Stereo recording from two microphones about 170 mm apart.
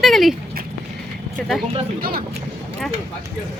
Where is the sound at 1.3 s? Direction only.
Centre (ahead or behind).